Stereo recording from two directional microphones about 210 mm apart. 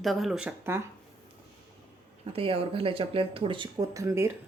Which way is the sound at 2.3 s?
25° right (ahead or behind).